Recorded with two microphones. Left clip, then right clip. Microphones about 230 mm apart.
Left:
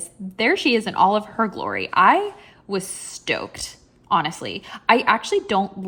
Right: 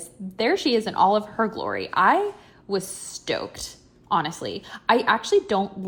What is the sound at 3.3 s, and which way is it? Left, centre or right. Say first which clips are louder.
A woman's voice: left 3 dB; left.